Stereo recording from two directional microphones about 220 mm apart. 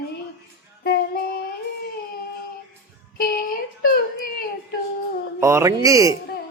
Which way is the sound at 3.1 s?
40° left (ahead or behind).